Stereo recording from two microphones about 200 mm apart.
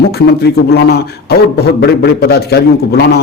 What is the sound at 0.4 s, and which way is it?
A man's voice, 55° left (ahead or behind).